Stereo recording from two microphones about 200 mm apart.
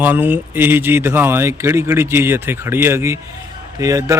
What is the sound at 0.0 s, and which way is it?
Speech, 10° right (ahead or behind).